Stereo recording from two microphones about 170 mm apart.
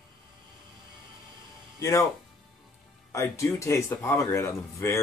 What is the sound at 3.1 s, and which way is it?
Speech, 15° left (ahead or behind).